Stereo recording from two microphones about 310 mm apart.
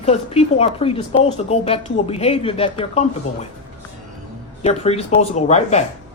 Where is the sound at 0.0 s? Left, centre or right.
Centre.